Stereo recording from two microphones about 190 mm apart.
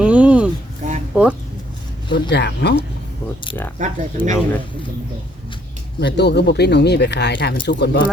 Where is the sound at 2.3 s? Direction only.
60° left (ahead or behind).